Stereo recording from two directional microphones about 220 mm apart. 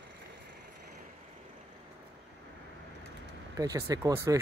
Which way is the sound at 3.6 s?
15° right (ahead or behind).